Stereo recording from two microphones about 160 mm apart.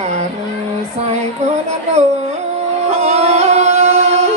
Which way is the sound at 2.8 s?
45° right (ahead or behind).